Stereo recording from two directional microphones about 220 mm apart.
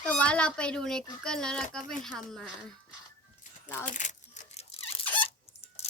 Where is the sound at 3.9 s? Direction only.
35° left (ahead or behind).